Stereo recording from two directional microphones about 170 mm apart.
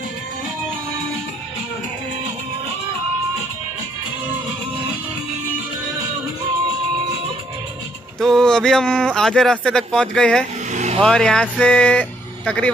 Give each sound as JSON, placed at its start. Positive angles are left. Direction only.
{"t": 8.2, "sound": "speech", "side_deg": 0}
{"t": 10.7, "sound": "vehicle", "side_deg": -45}
{"t": 11.0, "sound": "speech", "side_deg": 5}